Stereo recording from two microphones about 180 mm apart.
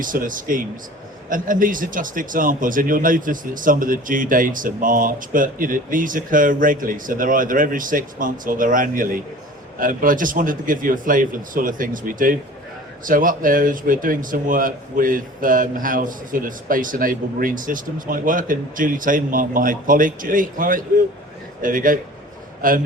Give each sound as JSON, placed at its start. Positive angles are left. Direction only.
{"t": 0.0, "sound": "a man's voice", "side_deg": -50}